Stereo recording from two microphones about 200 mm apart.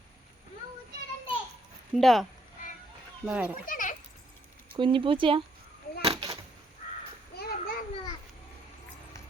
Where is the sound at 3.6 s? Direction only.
40° left (ahead or behind).